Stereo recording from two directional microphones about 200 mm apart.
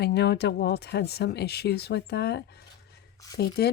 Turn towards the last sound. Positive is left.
turn(degrees=50)  # may be behind; listen again after turning